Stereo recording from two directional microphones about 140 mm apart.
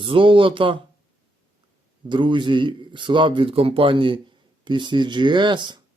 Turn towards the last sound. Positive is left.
turn(degrees=-35)  # may be behind; listen again after turning